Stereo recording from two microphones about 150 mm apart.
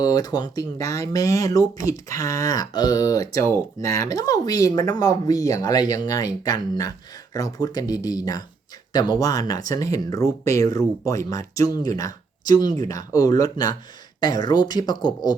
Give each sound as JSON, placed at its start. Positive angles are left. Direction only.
{"t": 0.0, "sound": "speech", "side_deg": 25}